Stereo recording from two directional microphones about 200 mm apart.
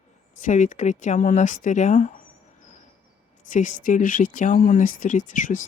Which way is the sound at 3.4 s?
40° left (ahead or behind).